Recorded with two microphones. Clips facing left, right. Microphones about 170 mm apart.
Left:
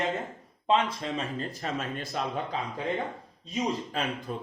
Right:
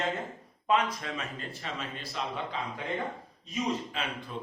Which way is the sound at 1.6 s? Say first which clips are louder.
Left 4 dB; 50° left (ahead or behind).